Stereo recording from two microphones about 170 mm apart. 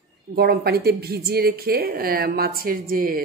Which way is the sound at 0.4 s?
65° right (ahead or behind).